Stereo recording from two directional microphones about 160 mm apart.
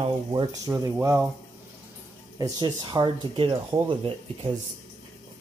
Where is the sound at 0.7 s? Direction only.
15° right (ahead or behind).